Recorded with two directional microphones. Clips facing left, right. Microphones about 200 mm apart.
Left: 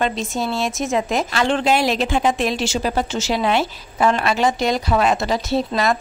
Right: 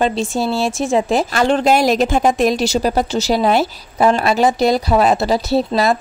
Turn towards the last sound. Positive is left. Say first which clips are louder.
# right 4 dB
turn(degrees=-35)  # may be behind; listen again after turning